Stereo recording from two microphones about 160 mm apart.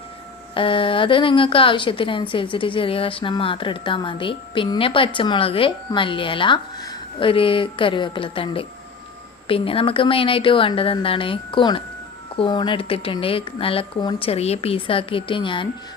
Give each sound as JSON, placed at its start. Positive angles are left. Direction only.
{"t": 0.5, "sound": "a woman's voice", "side_deg": 35}